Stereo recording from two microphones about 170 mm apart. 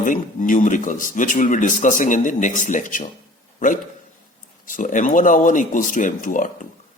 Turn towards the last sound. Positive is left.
turn(degrees=50)  # may be behind; listen again after turning